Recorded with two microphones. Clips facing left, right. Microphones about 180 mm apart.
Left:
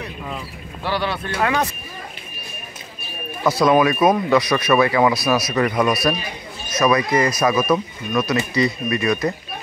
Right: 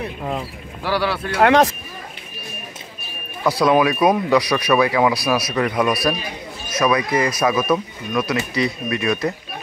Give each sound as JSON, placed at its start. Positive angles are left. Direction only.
{"t": 0.2, "sound": "speech", "side_deg": -45}
{"t": 0.8, "sound": "speech", "side_deg": -10}
{"t": 1.4, "sound": "speech", "side_deg": -80}
{"t": 3.4, "sound": "speech", "side_deg": -10}
{"t": 5.5, "sound": "speech", "side_deg": 5}